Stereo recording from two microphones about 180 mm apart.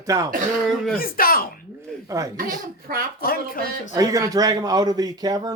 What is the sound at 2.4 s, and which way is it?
Speech, 55° right (ahead or behind).